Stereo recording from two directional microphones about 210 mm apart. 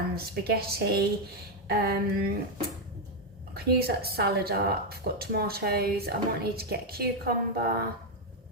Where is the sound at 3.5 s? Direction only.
50° right (ahead or behind).